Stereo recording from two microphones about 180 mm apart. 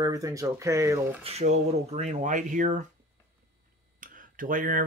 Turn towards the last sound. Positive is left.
turn(degrees=-50)  # may be behind; listen again after turning